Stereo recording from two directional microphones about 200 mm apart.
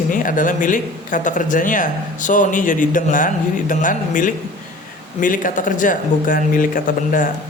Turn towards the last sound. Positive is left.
turn(degrees=45)  # may be behind; listen again after turning